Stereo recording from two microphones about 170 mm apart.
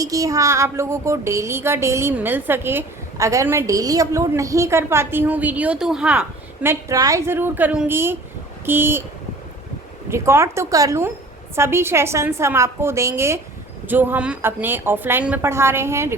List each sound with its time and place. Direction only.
0.0 s speech: 20° right (ahead or behind)
10.1 s speech: 15° right (ahead or behind)